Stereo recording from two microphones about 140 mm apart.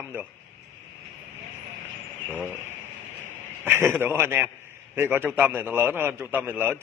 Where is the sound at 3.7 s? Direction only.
15° right (ahead or behind).